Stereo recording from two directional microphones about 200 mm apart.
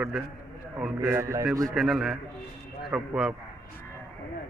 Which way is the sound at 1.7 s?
Centre (ahead or behind).